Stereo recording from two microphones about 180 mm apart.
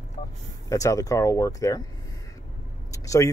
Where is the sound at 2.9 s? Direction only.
15° left (ahead or behind).